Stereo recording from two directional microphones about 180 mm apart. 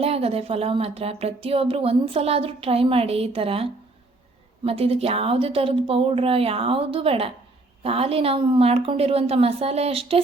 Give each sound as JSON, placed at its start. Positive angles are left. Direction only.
{"t": 0.0, "sound": "speech", "side_deg": -35}